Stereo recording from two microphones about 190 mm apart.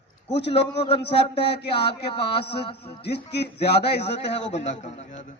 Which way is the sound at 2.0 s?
30° left (ahead or behind).